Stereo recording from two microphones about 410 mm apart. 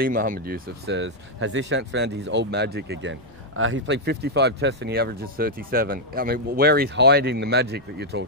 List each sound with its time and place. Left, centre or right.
0.0 s speech: centre